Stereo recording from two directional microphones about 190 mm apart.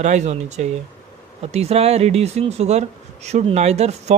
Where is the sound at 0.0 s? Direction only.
40° right (ahead or behind).